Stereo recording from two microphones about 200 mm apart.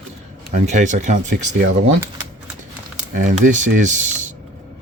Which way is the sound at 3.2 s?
40° right (ahead or behind).